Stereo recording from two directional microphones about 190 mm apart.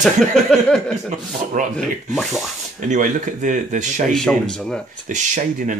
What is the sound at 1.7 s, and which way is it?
Speech, centre (ahead or behind).